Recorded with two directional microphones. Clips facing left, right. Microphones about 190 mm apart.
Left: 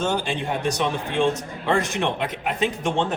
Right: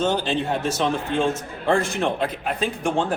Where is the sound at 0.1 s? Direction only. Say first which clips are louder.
Right 2 dB; 10° left (ahead or behind).